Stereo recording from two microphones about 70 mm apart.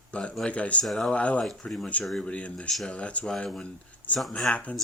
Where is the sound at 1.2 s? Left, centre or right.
Centre.